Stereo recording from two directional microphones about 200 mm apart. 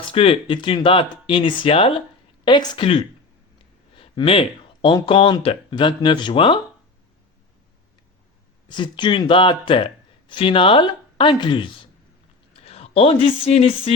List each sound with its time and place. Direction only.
0.1 s speech: 25° left (ahead or behind)
8.7 s speech: 25° left (ahead or behind)